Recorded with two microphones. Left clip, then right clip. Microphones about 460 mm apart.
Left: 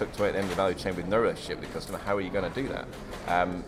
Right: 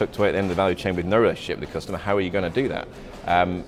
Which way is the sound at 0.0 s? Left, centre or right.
Right.